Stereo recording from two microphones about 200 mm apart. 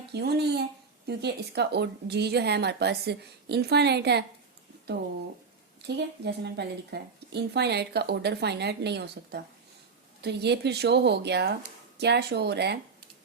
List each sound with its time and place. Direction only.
0.1 s a woman's voice: 55° right (ahead or behind)
5.8 s a woman's voice: 55° right (ahead or behind)